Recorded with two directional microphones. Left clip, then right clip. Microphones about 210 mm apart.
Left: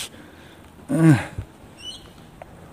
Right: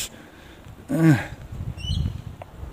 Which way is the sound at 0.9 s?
15° left (ahead or behind).